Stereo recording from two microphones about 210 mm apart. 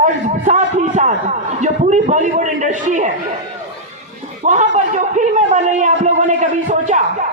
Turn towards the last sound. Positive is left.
turn(degrees=-35)  # may be behind; listen again after turning